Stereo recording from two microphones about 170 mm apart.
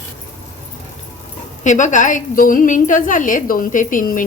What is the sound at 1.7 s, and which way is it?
A woman's voice, 45° left (ahead or behind).